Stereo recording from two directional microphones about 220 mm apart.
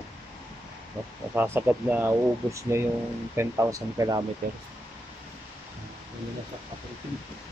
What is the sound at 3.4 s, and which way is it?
Speech, 15° right (ahead or behind).